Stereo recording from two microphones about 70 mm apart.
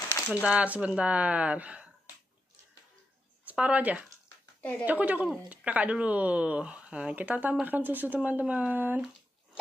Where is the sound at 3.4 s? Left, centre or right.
Centre.